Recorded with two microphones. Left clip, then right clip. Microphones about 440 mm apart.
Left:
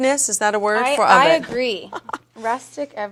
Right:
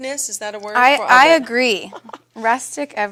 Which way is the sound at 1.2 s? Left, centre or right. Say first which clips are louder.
Right 4 dB; right.